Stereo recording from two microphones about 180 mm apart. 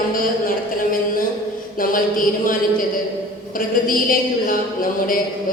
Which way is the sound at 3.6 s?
50° left (ahead or behind).